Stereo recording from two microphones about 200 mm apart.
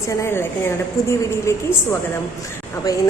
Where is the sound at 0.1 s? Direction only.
15° left (ahead or behind).